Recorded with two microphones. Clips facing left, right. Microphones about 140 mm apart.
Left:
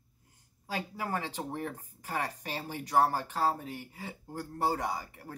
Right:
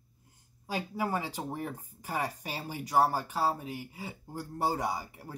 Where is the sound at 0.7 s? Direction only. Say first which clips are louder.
Right 2 dB; 15° right (ahead or behind).